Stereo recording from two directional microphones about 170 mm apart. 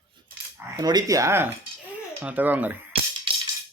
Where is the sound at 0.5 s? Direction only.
20° right (ahead or behind).